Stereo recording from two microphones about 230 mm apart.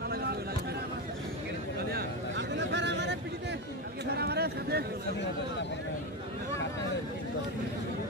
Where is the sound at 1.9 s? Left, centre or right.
Right.